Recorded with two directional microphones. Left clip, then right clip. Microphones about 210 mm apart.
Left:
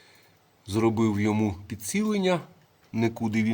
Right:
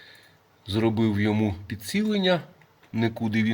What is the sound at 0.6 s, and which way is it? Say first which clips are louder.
Speech: even; 10° left (ahead or behind).